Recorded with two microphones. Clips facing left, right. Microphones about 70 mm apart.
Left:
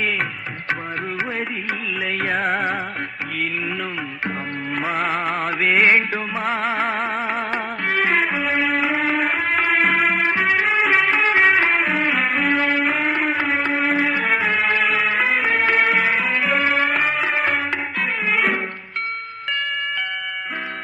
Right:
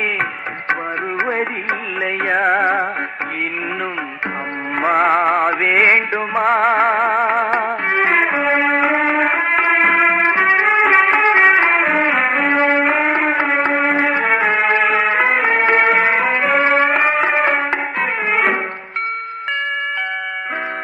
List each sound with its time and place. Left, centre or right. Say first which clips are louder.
2.3 s music: right 7 dB; centre
4.9 s music: right 10 dB; right
5.7 s music: right 1 dB; right
6.3 s music: right 10 dB; right
7.9 s music: right 2 dB; right
9.3 s music: right 4 dB; centre
9.6 s music: right 4 dB; right
10.2 s music: right 5 dB; right
12.2 s music: right 4 dB; centre
12.5 s music: right 5 dB; right
13.3 s a sound: right 5 dB; right
13.8 s music: right 4 dB; right